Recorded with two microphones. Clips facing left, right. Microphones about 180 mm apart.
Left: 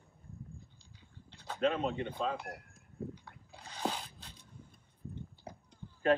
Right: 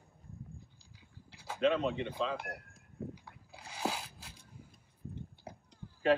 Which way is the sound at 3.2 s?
10° right (ahead or behind).